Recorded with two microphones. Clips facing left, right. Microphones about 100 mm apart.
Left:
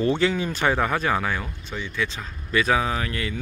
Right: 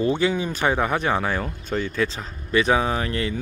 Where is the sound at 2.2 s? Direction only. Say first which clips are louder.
Right 2 dB; 25° right (ahead or behind).